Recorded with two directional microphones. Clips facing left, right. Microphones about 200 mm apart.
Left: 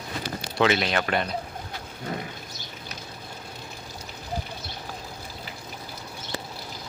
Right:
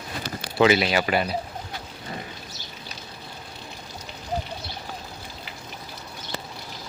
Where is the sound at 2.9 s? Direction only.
65° left (ahead or behind).